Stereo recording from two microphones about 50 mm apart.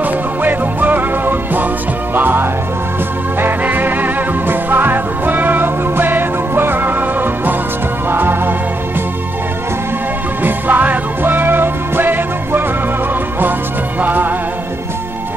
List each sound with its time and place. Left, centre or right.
0.0 s music: right
10.4 s music: right
14.0 s music: right